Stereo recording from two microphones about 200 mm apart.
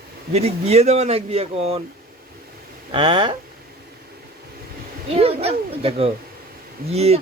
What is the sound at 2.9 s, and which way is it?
Speech, 25° right (ahead or behind).